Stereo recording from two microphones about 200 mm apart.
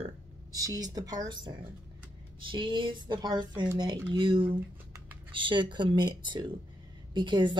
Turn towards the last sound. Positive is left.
turn(degrees=-25)  # may be behind; listen again after turning